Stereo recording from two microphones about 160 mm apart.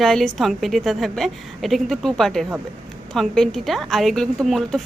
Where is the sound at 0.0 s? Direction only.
Centre (ahead or behind).